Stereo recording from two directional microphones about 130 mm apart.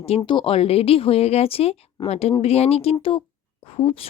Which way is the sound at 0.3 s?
40° left (ahead or behind).